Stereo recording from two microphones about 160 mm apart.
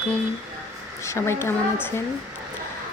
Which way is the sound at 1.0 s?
15° left (ahead or behind).